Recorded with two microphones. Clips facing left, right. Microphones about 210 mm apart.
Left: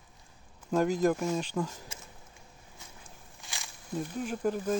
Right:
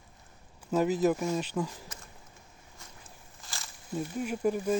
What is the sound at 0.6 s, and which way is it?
Speech, 5° right (ahead or behind).